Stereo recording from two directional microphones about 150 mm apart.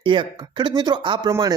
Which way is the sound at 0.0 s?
35° right (ahead or behind).